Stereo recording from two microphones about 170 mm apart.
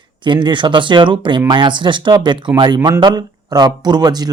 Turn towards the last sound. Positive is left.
turn(degrees=-25)  # may be behind; listen again after turning